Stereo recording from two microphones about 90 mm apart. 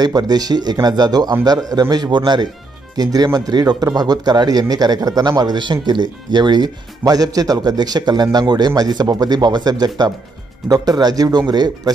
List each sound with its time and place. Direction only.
0.0 s speech: 50° right (ahead or behind)